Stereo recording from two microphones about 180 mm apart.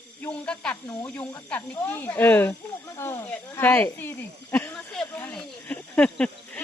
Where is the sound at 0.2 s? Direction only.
5° left (ahead or behind).